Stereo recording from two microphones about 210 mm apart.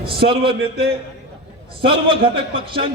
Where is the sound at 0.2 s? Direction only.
25° right (ahead or behind).